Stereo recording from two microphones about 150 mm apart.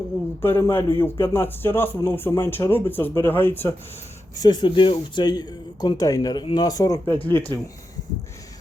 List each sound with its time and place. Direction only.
0.4 s speech: 15° left (ahead or behind)
4.4 s speech: 30° left (ahead or behind); by 7.6 s 15° left (ahead or behind)